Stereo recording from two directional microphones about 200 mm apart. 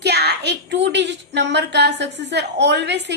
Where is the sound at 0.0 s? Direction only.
55° right (ahead or behind).